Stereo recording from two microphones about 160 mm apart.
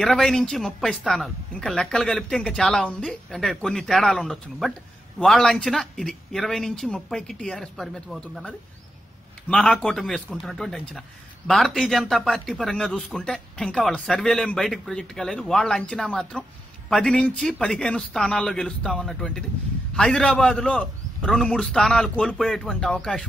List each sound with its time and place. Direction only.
0.0 s a man's voice: centre (ahead or behind)